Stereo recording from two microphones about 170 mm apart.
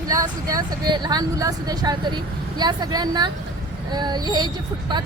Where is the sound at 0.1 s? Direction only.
20° right (ahead or behind).